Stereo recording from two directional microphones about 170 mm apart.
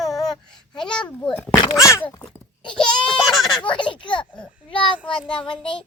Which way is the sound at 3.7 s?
30° left (ahead or behind).